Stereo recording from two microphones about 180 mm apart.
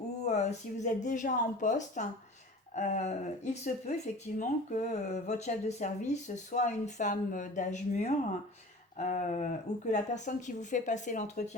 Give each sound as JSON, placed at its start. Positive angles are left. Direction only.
{"t": 0.2, "sound": "speech", "side_deg": 40}